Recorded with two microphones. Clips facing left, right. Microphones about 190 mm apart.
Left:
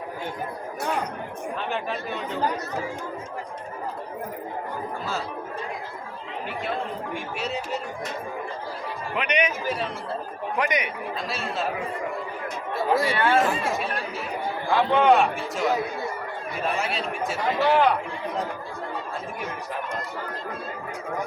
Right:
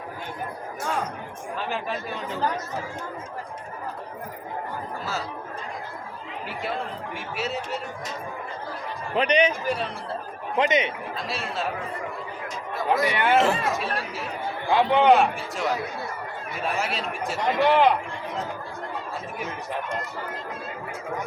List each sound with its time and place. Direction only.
1.5 s speech: centre (ahead or behind)
7.1 s speech: centre (ahead or behind)
9.1 s a man's voice: 30° right (ahead or behind)
9.6 s speech: centre (ahead or behind)
10.6 s speech: 25° right (ahead or behind)
11.3 s speech: centre (ahead or behind)
12.7 s speech: 30° left (ahead or behind)
13.1 s speech: 20° right (ahead or behind)
14.7 s speech: 20° right (ahead or behind)
15.1 s speech: centre (ahead or behind)
16.7 s speech: centre (ahead or behind)